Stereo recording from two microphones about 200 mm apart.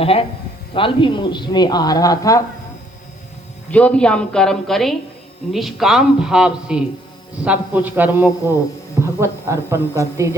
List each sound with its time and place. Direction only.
0.0 s speech: 30° left (ahead or behind)
3.7 s a man's voice: 5° left (ahead or behind); by 10.3 s 15° right (ahead or behind)